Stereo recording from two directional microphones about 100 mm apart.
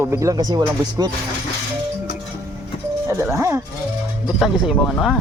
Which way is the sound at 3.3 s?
30° right (ahead or behind).